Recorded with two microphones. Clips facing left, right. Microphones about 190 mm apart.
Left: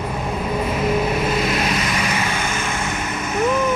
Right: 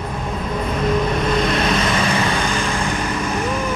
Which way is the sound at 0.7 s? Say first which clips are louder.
Right 2 dB; 5° left (ahead or behind).